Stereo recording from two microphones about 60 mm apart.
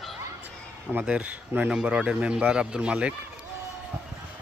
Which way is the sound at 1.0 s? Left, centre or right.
Right.